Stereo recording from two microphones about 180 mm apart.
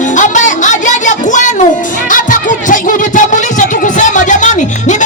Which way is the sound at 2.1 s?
45° left (ahead or behind).